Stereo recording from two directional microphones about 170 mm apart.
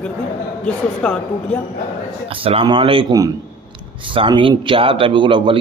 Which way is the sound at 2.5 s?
30° right (ahead or behind).